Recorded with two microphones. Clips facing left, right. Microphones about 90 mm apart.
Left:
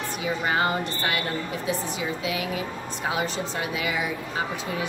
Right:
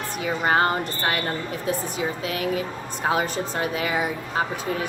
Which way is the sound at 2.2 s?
45° right (ahead or behind).